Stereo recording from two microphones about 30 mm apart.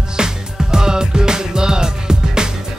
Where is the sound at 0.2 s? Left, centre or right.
Right.